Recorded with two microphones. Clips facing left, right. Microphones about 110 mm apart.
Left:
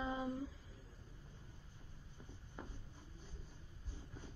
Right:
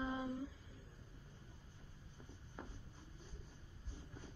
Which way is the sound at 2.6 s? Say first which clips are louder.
Left 1 dB; 5° left (ahead or behind).